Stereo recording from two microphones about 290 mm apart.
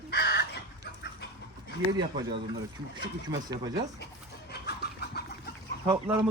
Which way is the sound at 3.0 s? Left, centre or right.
Centre.